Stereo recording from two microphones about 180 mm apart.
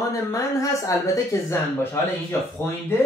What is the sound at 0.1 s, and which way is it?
Speech, 20° left (ahead or behind).